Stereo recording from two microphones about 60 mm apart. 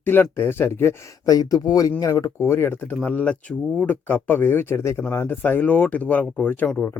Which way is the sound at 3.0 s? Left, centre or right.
Left.